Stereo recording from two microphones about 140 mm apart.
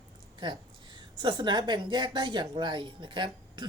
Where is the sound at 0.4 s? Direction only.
35° right (ahead or behind).